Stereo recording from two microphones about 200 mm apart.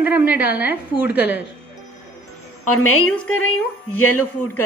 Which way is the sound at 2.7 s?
90° left.